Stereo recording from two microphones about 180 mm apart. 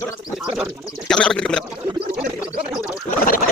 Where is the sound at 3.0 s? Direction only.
50° left (ahead or behind).